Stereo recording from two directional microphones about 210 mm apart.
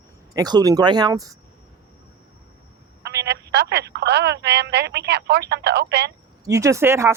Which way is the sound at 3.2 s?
55° right (ahead or behind).